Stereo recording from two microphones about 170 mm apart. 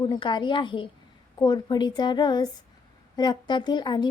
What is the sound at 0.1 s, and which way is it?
A woman's voice, 25° left (ahead or behind).